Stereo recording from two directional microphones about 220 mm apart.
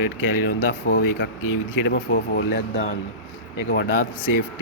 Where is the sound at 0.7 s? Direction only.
45° left (ahead or behind).